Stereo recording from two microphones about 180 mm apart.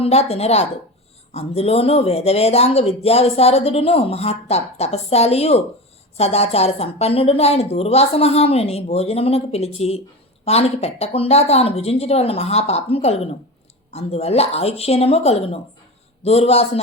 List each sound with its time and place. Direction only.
0.0 s speech: 35° left (ahead or behind)